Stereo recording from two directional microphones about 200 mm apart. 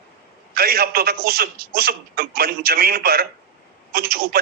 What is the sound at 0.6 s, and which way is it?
A man's voice, 50° right (ahead or behind).